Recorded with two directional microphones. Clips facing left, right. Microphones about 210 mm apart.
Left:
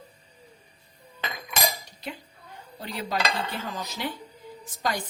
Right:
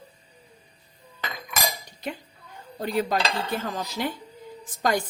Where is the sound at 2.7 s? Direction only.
50° right (ahead or behind).